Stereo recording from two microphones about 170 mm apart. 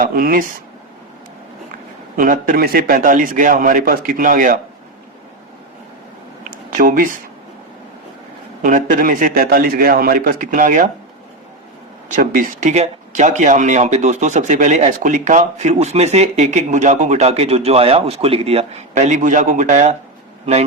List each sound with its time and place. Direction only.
0.0 s speech: 60° right (ahead or behind)
2.1 s speech: 50° right (ahead or behind)
6.5 s a sound: 55° right (ahead or behind)
8.6 s a man's voice: 50° right (ahead or behind)
12.1 s speech: 50° right (ahead or behind)